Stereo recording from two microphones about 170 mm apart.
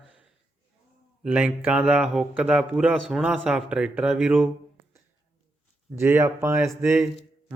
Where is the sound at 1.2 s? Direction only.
5° right (ahead or behind).